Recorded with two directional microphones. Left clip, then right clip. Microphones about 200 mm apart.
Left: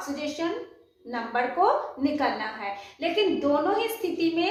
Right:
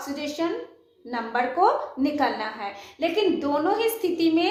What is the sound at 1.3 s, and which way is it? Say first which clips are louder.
Speech: right 2 dB; 50° right (ahead or behind).